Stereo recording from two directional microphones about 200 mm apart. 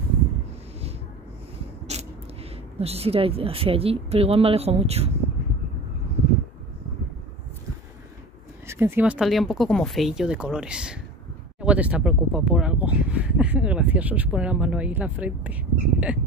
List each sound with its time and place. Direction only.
1.9 s creak: 35° right (ahead or behind)
2.8 s speech: 30° right (ahead or behind)
8.6 s speech: 10° right (ahead or behind)